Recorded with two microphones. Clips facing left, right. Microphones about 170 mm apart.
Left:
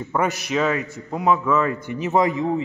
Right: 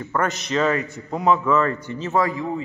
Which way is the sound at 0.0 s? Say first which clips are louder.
Left 1 dB; 10° left (ahead or behind).